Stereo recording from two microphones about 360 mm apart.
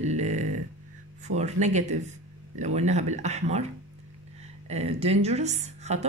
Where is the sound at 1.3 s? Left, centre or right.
Centre.